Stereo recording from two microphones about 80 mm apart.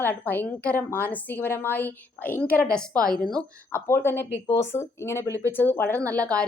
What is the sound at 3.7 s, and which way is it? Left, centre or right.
A woman's voice, left.